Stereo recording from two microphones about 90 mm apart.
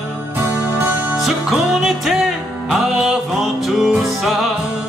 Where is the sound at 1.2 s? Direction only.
Centre (ahead or behind).